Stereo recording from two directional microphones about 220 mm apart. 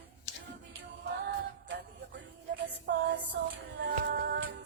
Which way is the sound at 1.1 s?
55° right (ahead or behind).